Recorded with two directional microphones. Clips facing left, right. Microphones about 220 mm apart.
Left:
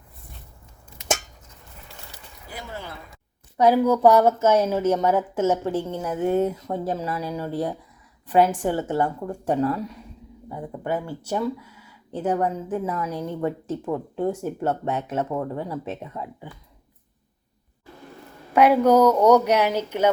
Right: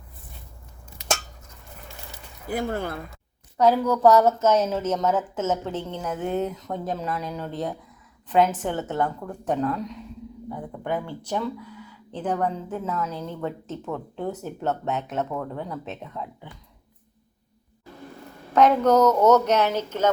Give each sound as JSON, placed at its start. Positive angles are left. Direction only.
{"t": 2.5, "sound": "speech", "side_deg": -50}
{"t": 3.6, "sound": "a woman's voice", "side_deg": 10}
{"t": 18.5, "sound": "a woman's voice", "side_deg": 10}